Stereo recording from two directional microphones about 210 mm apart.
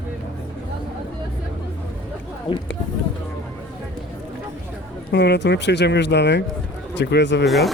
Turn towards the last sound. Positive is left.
turn(degrees=0)  # may be behind; listen again after turning